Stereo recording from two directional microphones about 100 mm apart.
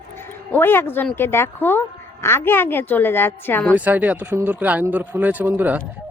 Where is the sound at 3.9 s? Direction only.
15° right (ahead or behind).